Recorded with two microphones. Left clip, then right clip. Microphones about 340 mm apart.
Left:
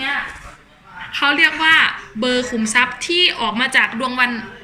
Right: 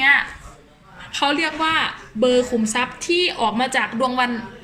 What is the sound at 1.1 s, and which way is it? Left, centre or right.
A woman's voice, right.